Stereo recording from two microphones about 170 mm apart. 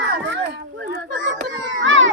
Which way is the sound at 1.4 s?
90° right.